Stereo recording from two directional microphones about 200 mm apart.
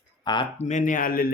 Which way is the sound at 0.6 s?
35° left (ahead or behind).